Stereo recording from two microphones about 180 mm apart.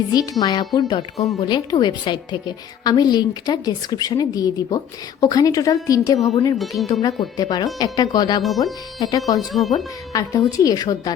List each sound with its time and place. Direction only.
0.1 s a woman's voice: 20° left (ahead or behind)
8.4 s speech: centre (ahead or behind)
9.0 s a woman's voice: 20° left (ahead or behind)
9.5 s speech: centre (ahead or behind)
9.7 s a woman's voice: 20° left (ahead or behind)